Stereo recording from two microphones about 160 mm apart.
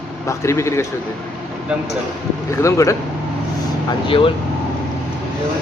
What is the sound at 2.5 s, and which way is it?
Speech, 20° left (ahead or behind).